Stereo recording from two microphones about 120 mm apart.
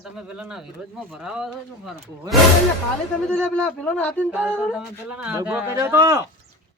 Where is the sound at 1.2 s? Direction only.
5° right (ahead or behind).